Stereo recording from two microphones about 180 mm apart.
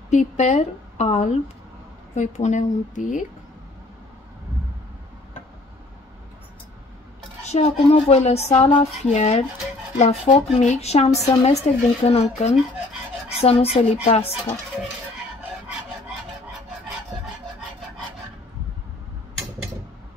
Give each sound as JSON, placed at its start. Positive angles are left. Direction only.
{"t": 0.1, "sound": "a woman's voice", "side_deg": 40}
{"t": 7.5, "sound": "speech", "side_deg": 35}